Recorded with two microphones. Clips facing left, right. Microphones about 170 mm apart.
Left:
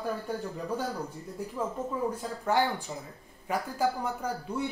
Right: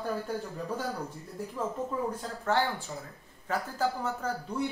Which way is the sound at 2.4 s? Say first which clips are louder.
Left 1 dB; 15° left (ahead or behind).